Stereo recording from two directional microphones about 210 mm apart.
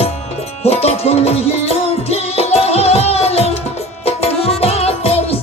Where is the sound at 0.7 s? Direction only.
30° left (ahead or behind).